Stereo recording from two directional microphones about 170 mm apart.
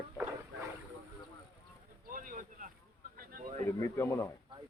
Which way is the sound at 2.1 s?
50° right (ahead or behind).